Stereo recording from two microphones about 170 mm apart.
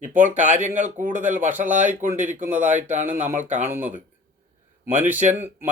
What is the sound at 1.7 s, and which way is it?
Speech, 50° right (ahead or behind).